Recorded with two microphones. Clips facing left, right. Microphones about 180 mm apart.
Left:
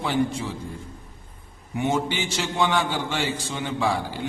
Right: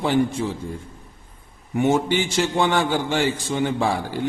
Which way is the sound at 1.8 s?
50° right (ahead or behind).